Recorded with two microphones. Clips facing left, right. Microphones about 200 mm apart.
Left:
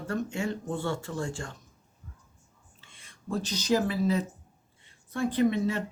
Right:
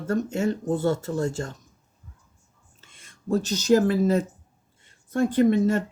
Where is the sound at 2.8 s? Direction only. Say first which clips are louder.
Right 6 dB; 45° right (ahead or behind).